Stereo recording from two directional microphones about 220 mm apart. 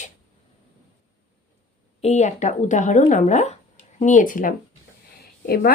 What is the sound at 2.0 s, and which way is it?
Speech, 30° left (ahead or behind).